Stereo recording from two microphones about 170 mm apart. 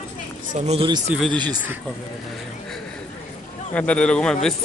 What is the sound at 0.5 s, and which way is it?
Speech, 40° right (ahead or behind).